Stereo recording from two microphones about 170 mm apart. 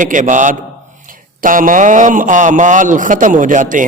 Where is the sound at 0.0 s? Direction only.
50° right (ahead or behind).